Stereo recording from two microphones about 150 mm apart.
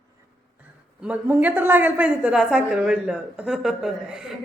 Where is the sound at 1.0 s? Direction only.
10° right (ahead or behind).